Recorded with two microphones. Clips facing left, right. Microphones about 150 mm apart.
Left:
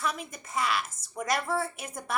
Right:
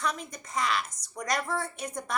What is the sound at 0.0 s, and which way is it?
A woman's voice, 5° left (ahead or behind).